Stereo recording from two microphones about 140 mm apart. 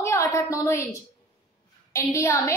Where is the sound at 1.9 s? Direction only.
20° left (ahead or behind).